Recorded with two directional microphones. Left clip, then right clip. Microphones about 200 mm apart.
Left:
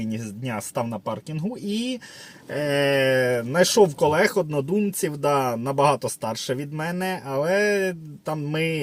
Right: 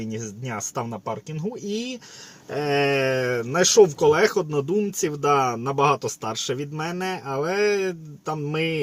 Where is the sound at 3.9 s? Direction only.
15° left (ahead or behind).